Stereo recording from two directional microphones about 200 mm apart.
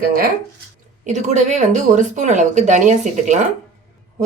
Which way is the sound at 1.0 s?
35° right (ahead or behind).